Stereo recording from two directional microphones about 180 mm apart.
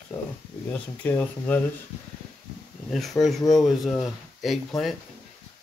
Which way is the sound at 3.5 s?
Centre (ahead or behind).